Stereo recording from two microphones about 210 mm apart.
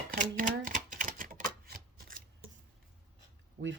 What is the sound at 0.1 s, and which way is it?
Typewriter, 40° right (ahead or behind).